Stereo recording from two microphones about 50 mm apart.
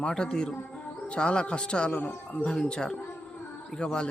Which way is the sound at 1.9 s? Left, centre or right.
Left.